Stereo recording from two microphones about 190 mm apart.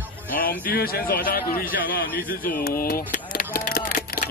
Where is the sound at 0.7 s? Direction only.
50° left (ahead or behind).